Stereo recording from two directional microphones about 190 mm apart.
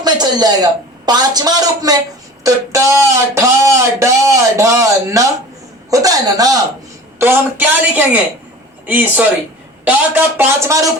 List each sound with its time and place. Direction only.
0.0 s a man's voice: 20° right (ahead or behind)
10.3 s speech: 10° right (ahead or behind)